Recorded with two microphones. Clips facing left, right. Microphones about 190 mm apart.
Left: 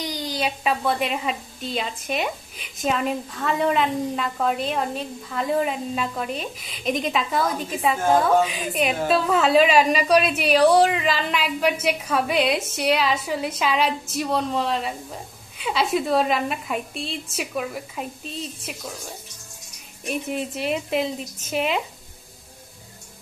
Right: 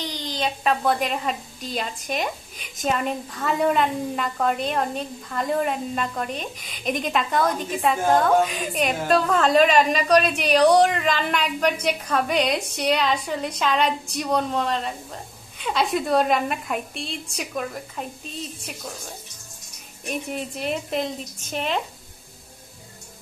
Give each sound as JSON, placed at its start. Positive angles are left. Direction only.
{"t": 0.0, "sound": "a woman's voice", "side_deg": 10}
{"t": 20.1, "sound": "a woman's voice", "side_deg": 0}